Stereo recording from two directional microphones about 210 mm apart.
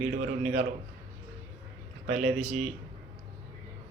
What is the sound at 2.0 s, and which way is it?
Speech, 35° right (ahead or behind).